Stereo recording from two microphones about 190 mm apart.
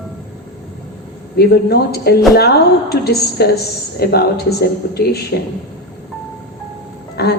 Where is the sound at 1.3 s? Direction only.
55° left (ahead or behind).